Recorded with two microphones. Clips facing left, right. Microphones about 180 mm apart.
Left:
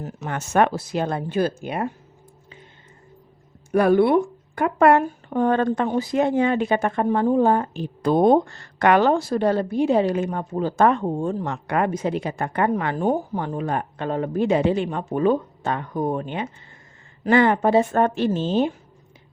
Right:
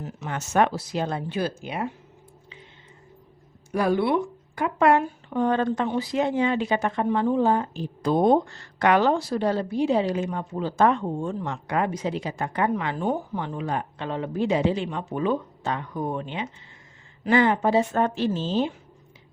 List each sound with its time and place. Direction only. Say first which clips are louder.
0.0 s speech: left 3 dB; 50° left (ahead or behind)
3.7 s speech: left 6 dB; 55° left (ahead or behind); by 11.5 s 40° left (ahead or behind)
11.5 s a woman's voice: left 3 dB; 60° left (ahead or behind)